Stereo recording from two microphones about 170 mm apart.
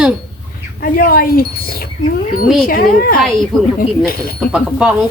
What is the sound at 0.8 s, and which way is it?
Speech, 55° left (ahead or behind).